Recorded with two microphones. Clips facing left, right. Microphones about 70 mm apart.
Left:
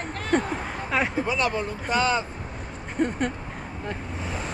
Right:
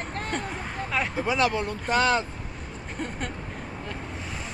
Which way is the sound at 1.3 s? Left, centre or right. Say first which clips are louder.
Right 1 dB; right.